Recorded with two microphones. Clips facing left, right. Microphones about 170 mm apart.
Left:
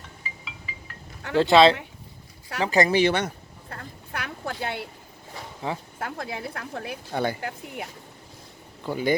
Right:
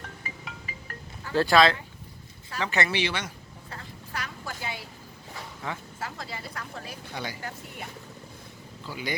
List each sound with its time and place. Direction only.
0.2 s music: 50° right (ahead or behind)
1.4 s speech: 25° left (ahead or behind)
2.6 s a sound: 35° left (ahead or behind); by 4.5 s 60° left (ahead or behind)
4.6 s speech: 65° left (ahead or behind)
5.6 s speech: 25° left (ahead or behind)
6.0 s speech: 55° left (ahead or behind)